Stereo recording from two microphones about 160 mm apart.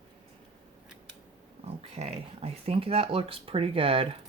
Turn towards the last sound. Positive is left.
turn(degrees=-35)  # may be behind; listen again after turning